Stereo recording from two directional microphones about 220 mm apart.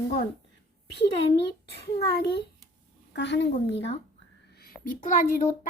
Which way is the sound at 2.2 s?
50° left (ahead or behind).